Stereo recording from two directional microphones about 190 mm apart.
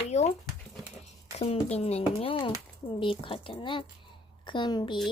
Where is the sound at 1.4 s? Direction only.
35° left (ahead or behind).